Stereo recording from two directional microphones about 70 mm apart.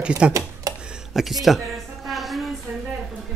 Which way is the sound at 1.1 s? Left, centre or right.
Centre.